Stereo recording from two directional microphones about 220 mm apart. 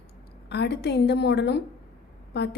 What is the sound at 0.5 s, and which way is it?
A woman's voice, 50° left (ahead or behind).